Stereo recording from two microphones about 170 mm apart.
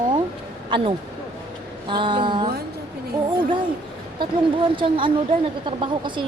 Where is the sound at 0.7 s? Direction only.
30° right (ahead or behind).